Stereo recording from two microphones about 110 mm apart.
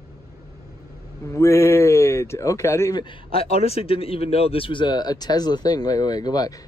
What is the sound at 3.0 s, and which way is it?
Speech, 50° left (ahead or behind).